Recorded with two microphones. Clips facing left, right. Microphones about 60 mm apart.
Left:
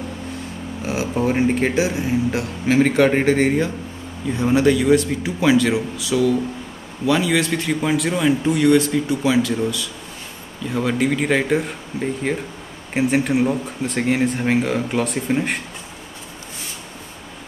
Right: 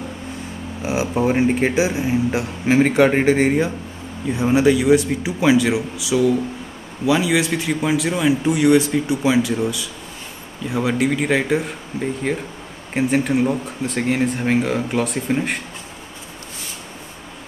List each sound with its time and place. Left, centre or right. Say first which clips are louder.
0.8 s speech: right 2 dB; centre